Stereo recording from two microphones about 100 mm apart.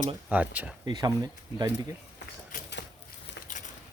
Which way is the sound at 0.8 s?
40° right (ahead or behind).